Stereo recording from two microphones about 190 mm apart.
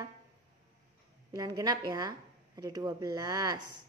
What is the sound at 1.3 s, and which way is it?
A woman's voice, 20° right (ahead or behind).